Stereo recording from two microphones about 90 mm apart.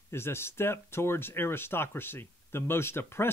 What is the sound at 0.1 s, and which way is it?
Speech, 30° left (ahead or behind).